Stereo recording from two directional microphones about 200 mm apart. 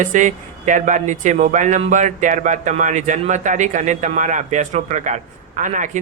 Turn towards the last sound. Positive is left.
turn(degrees=-40)  # may be behind; listen again after turning